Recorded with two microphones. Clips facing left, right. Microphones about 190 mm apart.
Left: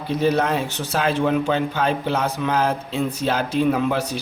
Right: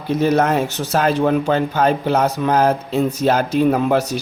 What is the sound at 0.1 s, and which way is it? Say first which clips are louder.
A man's voice: right 4 dB; 45° right (ahead or behind).